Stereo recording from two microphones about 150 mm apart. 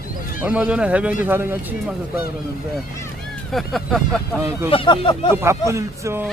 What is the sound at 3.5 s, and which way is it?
Speech, centre (ahead or behind).